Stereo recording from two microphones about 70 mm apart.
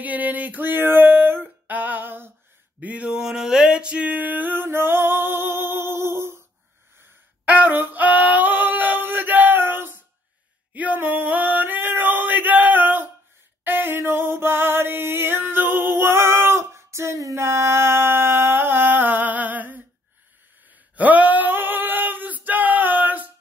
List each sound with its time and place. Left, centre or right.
0.0 s a sound: right
2.8 s music: centre; by 6.4 s right
7.0 s female singing: right
10.7 s male singing: right
13.7 s music: right
20.9 s male singing: right